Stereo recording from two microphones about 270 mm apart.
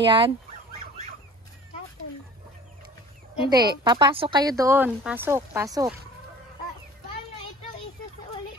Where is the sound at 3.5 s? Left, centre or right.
Centre.